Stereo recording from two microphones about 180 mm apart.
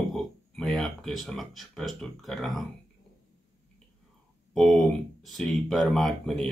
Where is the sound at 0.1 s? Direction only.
Centre (ahead or behind).